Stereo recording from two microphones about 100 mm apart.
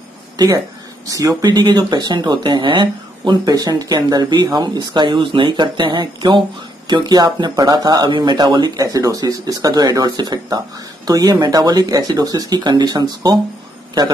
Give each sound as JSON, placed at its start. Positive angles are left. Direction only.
{"t": 1.0, "sound": "speech", "side_deg": -35}